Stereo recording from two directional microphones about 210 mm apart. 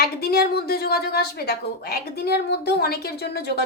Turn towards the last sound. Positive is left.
turn(degrees=50)  # may be behind; listen again after turning